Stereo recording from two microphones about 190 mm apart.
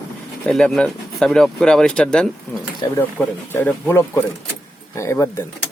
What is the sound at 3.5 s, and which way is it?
Speech, 10° left (ahead or behind).